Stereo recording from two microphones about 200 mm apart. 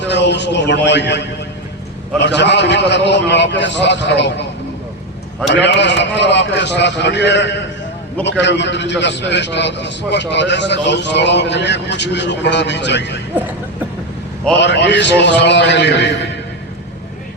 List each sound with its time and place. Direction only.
0.1 s a man's voice: 60° left (ahead or behind)
5.5 s a man's voice: 60° left (ahead or behind)
14.6 s a man's voice: 60° left (ahead or behind)